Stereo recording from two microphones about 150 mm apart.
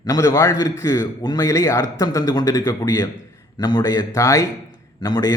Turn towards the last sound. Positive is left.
turn(degrees=25)  # may be behind; listen again after turning